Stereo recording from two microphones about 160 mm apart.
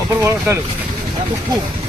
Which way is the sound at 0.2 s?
15° right (ahead or behind).